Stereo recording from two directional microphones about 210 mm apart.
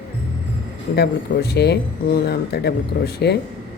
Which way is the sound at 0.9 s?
50° left (ahead or behind).